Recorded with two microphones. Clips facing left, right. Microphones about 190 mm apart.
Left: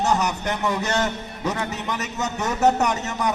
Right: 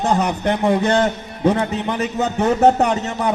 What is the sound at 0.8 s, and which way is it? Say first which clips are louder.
Speech: right 7 dB; 30° right (ahead or behind).